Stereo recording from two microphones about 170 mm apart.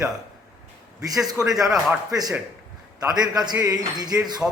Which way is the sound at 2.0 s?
20° right (ahead or behind).